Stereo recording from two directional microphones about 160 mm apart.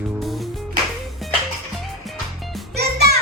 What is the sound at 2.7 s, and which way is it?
Music, 90° right.